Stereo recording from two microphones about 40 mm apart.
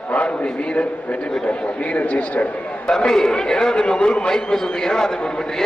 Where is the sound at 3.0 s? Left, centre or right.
Centre.